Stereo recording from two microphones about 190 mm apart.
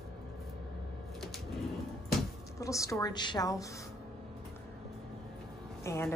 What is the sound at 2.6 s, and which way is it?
A woman's voice, 15° left (ahead or behind).